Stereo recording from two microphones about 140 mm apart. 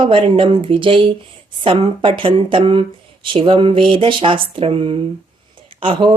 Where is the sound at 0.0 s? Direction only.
40° right (ahead or behind).